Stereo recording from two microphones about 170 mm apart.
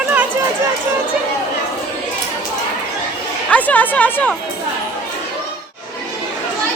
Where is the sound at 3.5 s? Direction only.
10° left (ahead or behind).